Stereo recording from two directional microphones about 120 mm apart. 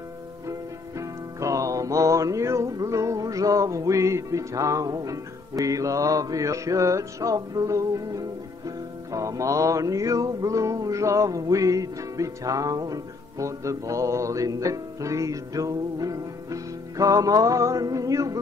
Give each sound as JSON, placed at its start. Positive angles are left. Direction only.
{"t": 0.5, "sound": "music", "side_deg": -25}